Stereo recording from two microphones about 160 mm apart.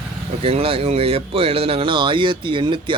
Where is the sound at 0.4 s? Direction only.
35° right (ahead or behind).